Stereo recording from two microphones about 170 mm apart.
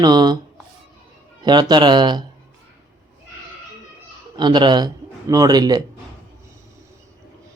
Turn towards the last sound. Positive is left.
turn(degrees=-25)  # may be behind; listen again after turning